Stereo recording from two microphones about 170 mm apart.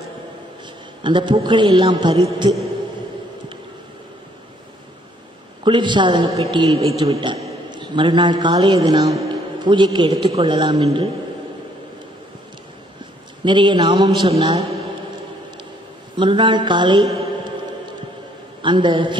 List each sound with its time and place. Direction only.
1.0 s a man's voice: 30° right (ahead or behind)
5.6 s a man's voice: 30° right (ahead or behind)
13.4 s a man's voice: 25° right (ahead or behind)
16.2 s a man's voice: 30° right (ahead or behind)
18.6 s a man's voice: 25° right (ahead or behind)